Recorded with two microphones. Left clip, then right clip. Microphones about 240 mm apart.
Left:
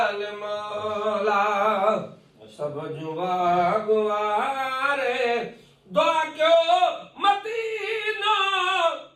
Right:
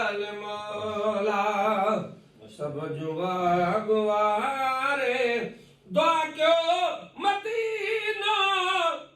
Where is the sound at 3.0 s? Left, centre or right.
Left.